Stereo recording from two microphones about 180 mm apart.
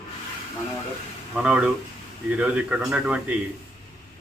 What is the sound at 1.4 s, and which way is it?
A man's voice, 5° right (ahead or behind).